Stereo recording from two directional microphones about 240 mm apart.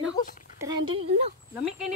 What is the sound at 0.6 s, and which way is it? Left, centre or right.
Speech, centre.